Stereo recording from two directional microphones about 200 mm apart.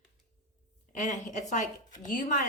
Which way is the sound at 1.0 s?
40° left (ahead or behind).